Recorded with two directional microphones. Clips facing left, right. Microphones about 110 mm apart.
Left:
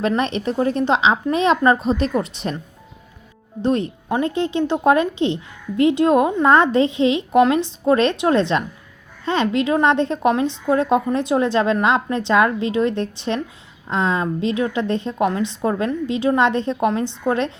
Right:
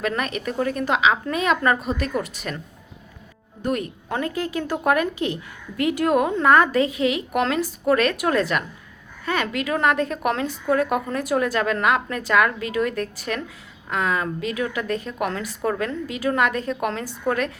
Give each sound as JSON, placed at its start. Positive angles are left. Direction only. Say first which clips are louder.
{"t": 0.0, "sound": "speech", "louder": "left 5 dB", "side_deg": 30}
{"t": 3.6, "sound": "speech", "louder": "left 5 dB", "side_deg": 30}